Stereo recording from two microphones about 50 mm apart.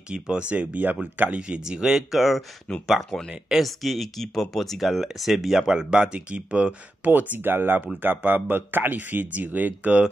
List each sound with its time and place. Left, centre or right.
0.1 s speech: right
1.5 s speech: centre
2.7 s speech: centre
3.3 s speech: centre
3.6 s speech: centre; by 7.1 s right
7.1 s speech: right